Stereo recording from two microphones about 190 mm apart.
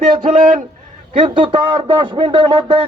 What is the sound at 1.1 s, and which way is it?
Speech, 25° right (ahead or behind).